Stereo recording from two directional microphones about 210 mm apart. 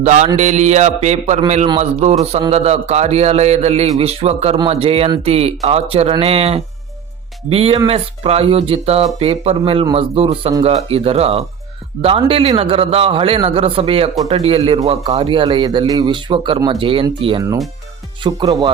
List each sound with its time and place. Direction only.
0.0 s a man's voice: 35° right (ahead or behind)